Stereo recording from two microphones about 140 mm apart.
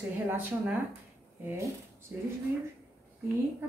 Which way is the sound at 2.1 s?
10° right (ahead or behind).